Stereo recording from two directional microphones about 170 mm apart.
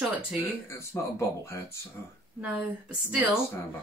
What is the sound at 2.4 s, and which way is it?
Speech, 10° right (ahead or behind).